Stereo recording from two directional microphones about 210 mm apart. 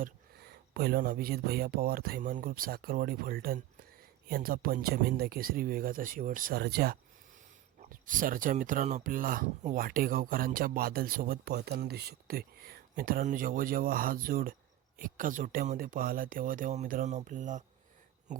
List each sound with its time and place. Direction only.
0.0 s speech: 50° right (ahead or behind)